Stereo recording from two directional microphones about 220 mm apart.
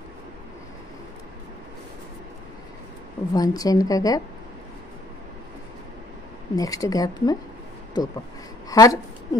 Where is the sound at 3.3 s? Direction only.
15° left (ahead or behind).